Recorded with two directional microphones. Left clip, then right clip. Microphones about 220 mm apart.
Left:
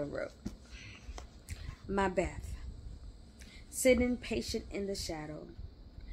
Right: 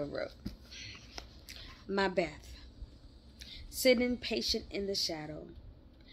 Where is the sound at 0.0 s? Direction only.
5° left (ahead or behind).